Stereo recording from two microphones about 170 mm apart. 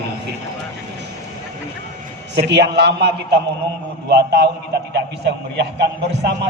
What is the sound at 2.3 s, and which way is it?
Speech, 80° right.